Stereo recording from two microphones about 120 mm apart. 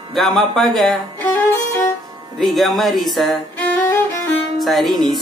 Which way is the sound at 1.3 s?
15° left (ahead or behind).